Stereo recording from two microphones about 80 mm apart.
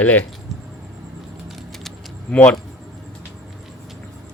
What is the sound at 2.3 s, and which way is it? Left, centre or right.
Speech, centre.